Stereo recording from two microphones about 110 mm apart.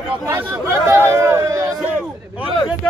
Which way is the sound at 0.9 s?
25° right (ahead or behind).